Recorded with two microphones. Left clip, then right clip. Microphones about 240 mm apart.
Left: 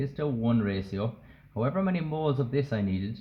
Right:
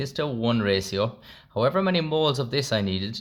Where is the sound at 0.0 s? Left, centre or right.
Right.